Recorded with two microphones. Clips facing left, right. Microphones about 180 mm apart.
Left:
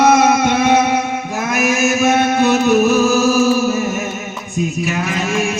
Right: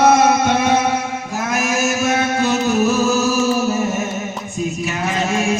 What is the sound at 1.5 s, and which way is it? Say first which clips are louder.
Music: left 4 dB; 65° left (ahead or behind).